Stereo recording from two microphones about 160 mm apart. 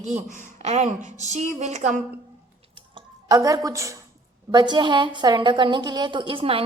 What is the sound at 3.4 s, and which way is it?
A woman's voice, 20° right (ahead or behind).